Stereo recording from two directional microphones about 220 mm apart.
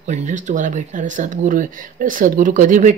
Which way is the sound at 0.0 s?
35° right (ahead or behind).